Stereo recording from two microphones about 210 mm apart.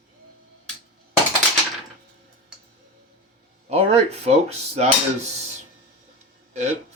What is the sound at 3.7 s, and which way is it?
Speech, 30° right (ahead or behind).